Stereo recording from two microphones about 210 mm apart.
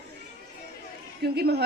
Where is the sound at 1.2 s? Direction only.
50° right (ahead or behind).